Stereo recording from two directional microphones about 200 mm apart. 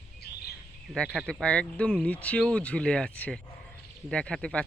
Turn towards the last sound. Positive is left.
turn(degrees=5)  # may be behind; listen again after turning